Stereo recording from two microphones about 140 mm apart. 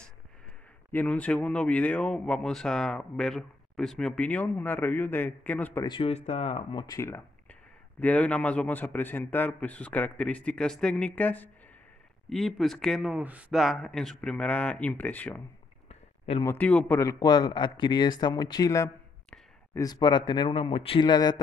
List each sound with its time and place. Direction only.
0.9 s speech: 10° left (ahead or behind)
5.9 s a man's voice: 35° left (ahead or behind)
6.1 s speech: 50° left (ahead or behind); by 7.0 s 35° left (ahead or behind)
7.0 s a sound: 15° left (ahead or behind)
8.0 s speech: 10° left (ahead or behind)
12.3 s speech: centre (ahead or behind)
16.4 s speech: 10° left (ahead or behind)
17.0 s a man's voice: 25° left (ahead or behind)